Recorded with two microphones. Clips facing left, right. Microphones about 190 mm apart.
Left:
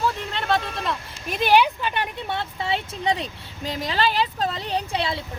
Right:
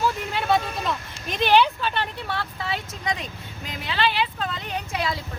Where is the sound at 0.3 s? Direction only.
5° right (ahead or behind).